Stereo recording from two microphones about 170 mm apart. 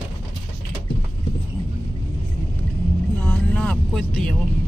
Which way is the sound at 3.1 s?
5° left (ahead or behind).